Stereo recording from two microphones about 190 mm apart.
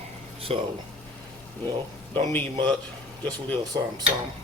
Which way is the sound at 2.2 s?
10° left (ahead or behind).